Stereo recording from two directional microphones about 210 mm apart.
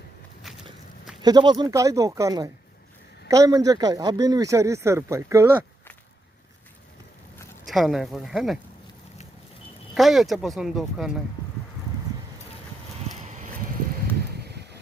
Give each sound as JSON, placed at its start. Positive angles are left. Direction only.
{"t": 0.4, "sound": "biting", "side_deg": 0}
{"t": 1.2, "sound": "speech", "side_deg": -20}
{"t": 7.6, "sound": "speech", "side_deg": 0}
{"t": 9.9, "sound": "speech", "side_deg": 0}
{"t": 14.3, "sound": "a sound", "side_deg": -50}